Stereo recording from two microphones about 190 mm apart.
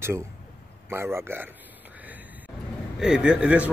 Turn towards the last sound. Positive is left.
turn(degrees=-5)  # may be behind; listen again after turning